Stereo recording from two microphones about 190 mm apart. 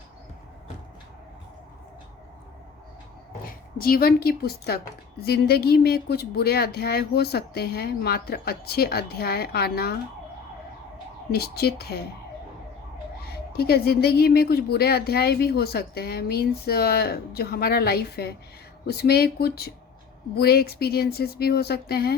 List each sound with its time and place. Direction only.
3.8 s speech: 50° left (ahead or behind)
11.3 s speech: 55° left (ahead or behind)
13.2 s speech: 55° left (ahead or behind)